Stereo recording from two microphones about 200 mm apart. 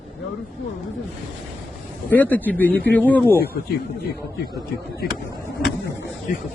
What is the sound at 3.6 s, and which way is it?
Speech, 50° left (ahead or behind).